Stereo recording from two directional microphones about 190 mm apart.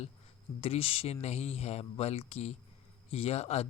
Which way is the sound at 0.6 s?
30° left (ahead or behind).